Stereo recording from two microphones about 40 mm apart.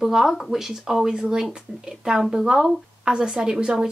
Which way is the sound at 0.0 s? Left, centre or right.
Centre.